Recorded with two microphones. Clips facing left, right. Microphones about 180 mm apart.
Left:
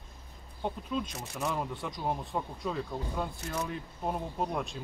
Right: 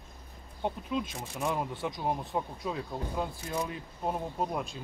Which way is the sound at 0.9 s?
10° right (ahead or behind).